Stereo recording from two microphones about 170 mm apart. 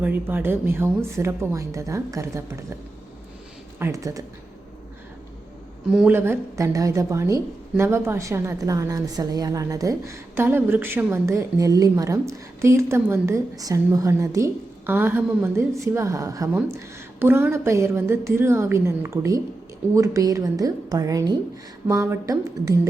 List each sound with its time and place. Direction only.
0.0 s a woman's voice: 10° right (ahead or behind)
3.8 s a woman's voice: 15° right (ahead or behind)
5.9 s a woman's voice: 10° right (ahead or behind)